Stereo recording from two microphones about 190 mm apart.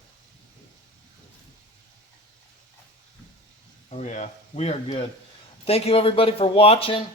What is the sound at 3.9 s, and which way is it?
Speech, 40° left (ahead or behind).